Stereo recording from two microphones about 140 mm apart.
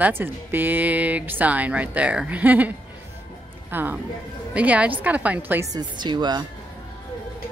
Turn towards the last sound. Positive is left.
turn(degrees=-30)  # may be behind; listen again after turning